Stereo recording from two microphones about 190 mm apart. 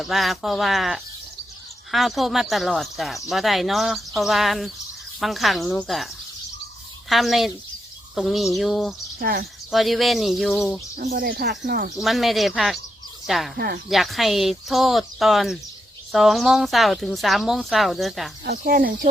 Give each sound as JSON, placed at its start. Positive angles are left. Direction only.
{"t": 0.0, "sound": "speech", "side_deg": 0}
{"t": 7.1, "sound": "speech", "side_deg": 0}
{"t": 9.1, "sound": "speech", "side_deg": -55}
{"t": 9.7, "sound": "speech", "side_deg": 0}
{"t": 10.9, "sound": "speech", "side_deg": -50}
{"t": 11.9, "sound": "speech", "side_deg": 0}
{"t": 18.4, "sound": "speech", "side_deg": -55}